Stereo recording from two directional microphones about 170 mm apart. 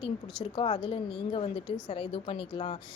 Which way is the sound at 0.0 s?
30° left (ahead or behind).